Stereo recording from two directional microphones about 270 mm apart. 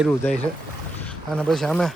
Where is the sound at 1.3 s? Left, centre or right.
Centre.